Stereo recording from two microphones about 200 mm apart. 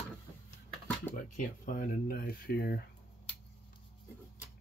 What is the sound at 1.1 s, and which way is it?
Speech, 40° left (ahead or behind).